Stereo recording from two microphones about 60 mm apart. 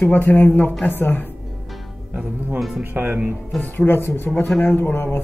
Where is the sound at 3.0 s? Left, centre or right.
Right.